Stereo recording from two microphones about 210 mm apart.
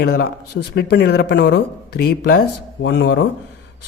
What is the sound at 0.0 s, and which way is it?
Speech, 45° left (ahead or behind).